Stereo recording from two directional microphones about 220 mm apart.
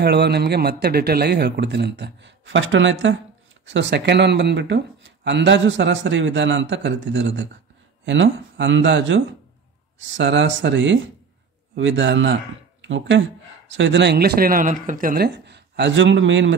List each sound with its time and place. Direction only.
0.0 s a man's voice: 50° right (ahead or behind)